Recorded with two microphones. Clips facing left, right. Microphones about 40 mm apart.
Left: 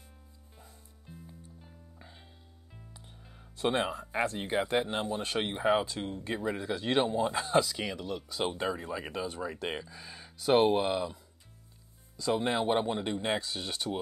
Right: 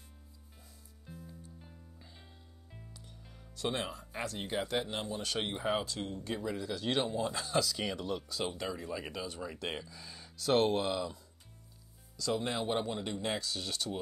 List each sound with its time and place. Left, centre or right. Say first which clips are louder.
2.0 s music: left 3 dB; left
2.9 s speech: left 1 dB; left
7.8 s speech: even; centre
8.5 s speech: left 7 dB; left
12.2 s speech: left 5 dB; left